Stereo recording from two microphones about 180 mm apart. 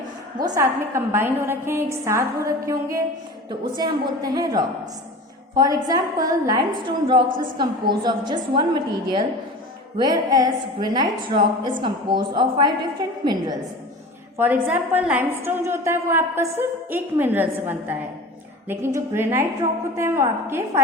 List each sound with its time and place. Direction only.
0.3 s a woman's voice: 20° right (ahead or behind)
14.3 s a woman's voice: 10° right (ahead or behind)